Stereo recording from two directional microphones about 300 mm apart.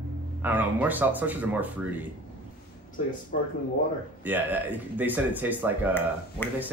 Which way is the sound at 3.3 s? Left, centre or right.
Left.